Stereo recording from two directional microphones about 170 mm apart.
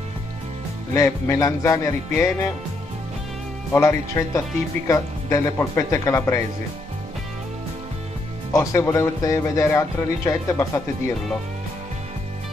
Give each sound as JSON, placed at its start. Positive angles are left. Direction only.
{"t": 0.9, "sound": "speech", "side_deg": 15}
{"t": 3.7, "sound": "speech", "side_deg": 15}
{"t": 8.5, "sound": "speech", "side_deg": 15}